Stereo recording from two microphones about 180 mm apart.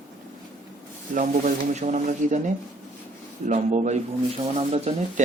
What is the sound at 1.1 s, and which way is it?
Speech, 40° right (ahead or behind).